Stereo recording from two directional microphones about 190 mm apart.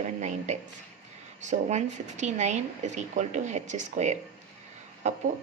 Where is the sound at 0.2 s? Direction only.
40° right (ahead or behind).